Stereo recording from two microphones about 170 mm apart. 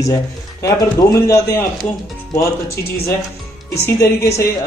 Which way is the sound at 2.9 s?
65° left (ahead or behind).